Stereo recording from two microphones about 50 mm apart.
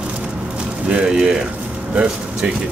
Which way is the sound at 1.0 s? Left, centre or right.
Centre.